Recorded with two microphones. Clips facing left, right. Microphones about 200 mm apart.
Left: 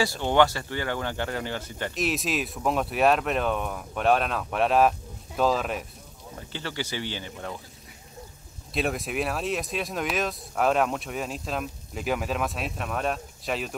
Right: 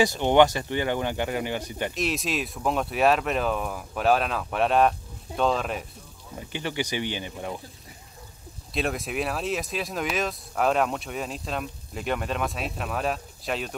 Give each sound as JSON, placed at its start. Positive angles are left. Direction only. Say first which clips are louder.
{"t": 0.0, "sound": "speech", "louder": "right 3 dB", "side_deg": -20}
{"t": 2.0, "sound": "speech", "louder": "left 2 dB", "side_deg": 0}
{"t": 6.5, "sound": "speech", "louder": "right 4 dB", "side_deg": -15}
{"t": 8.7, "sound": "speech", "louder": "even", "side_deg": 0}